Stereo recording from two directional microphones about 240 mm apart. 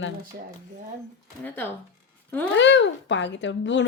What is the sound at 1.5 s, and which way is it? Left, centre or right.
Speech, centre.